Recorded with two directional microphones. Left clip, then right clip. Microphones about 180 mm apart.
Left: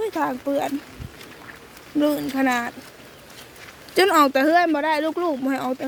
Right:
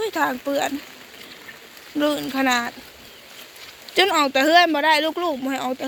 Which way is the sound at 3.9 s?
20° left (ahead or behind).